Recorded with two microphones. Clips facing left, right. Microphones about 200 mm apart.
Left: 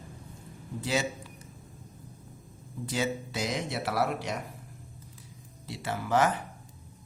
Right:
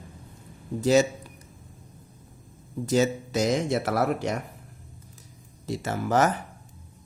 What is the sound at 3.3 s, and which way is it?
Speech, 45° right (ahead or behind).